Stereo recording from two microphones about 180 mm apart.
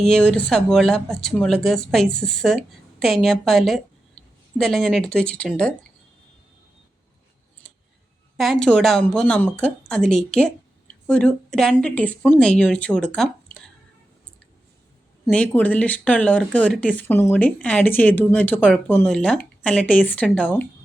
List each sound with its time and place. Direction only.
0.0 s a woman's voice: 5° left (ahead or behind)
7.6 s tick: 5° left (ahead or behind)
8.4 s a woman's voice: centre (ahead or behind)
15.3 s speech: 5° left (ahead or behind)